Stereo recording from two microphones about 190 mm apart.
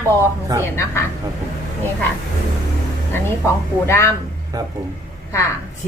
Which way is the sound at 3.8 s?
15° left (ahead or behind).